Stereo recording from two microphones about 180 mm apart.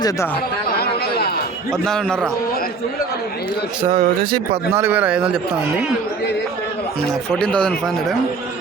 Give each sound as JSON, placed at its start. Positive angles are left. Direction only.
{"t": 0.8, "sound": "chatter", "side_deg": 60}
{"t": 1.8, "sound": "speech", "side_deg": 5}
{"t": 3.9, "sound": "speech", "side_deg": -60}
{"t": 4.7, "sound": "a man's voice", "side_deg": -10}
{"t": 7.3, "sound": "speech", "side_deg": 5}